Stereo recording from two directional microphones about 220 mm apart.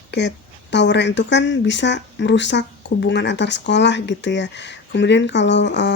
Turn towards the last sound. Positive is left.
turn(degrees=55)  # may be behind; listen again after turning